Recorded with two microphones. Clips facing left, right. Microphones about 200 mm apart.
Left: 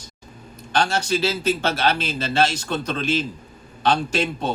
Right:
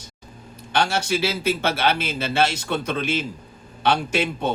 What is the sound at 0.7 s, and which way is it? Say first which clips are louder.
Speech: left 1 dB; 10° right (ahead or behind).